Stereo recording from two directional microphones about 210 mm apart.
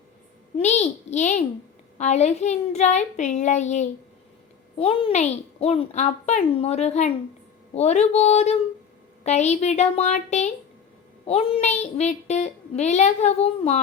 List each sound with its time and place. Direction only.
0.5 s a child's voice: 30° left (ahead or behind)